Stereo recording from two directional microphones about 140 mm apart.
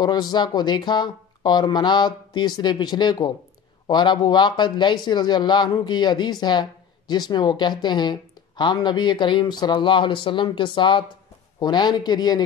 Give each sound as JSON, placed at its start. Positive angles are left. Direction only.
{"t": 0.0, "sound": "a man's voice", "side_deg": 30}